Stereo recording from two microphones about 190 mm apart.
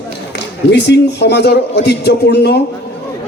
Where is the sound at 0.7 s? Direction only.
60° left (ahead or behind).